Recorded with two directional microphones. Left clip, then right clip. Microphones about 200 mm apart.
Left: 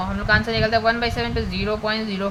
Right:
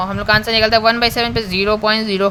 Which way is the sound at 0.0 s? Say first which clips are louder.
Right 5 dB; 55° right (ahead or behind).